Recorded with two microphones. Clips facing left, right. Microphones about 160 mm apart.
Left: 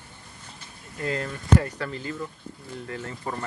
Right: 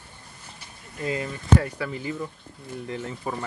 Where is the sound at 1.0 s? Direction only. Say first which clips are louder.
Right 1 dB; 5° right (ahead or behind).